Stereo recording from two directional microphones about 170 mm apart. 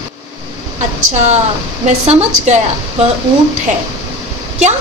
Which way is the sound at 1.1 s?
40° right (ahead or behind).